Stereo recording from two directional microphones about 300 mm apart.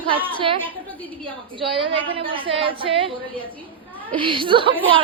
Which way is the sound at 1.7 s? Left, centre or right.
Centre.